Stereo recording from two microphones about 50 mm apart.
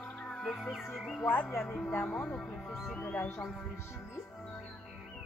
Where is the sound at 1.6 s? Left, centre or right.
Centre.